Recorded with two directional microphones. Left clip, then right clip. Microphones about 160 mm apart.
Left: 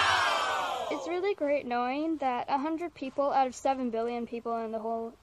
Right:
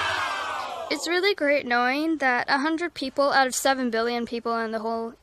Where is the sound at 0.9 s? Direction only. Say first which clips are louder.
Right 7 dB; 20° right (ahead or behind).